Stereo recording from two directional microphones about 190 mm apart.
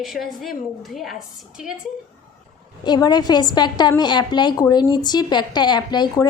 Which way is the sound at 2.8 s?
20° left (ahead or behind).